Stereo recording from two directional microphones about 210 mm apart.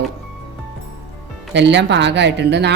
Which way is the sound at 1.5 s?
55° right (ahead or behind).